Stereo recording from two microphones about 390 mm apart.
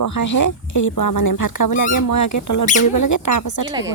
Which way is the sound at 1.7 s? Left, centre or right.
Centre.